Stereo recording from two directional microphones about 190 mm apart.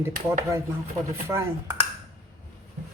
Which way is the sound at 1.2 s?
15° right (ahead or behind).